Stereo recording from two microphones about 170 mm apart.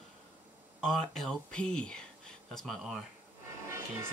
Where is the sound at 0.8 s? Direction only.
5° left (ahead or behind).